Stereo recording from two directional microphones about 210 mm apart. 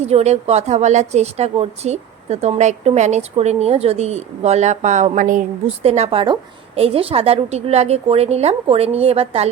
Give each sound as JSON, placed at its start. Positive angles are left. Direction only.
{"t": 0.0, "sound": "a woman's voice", "side_deg": -30}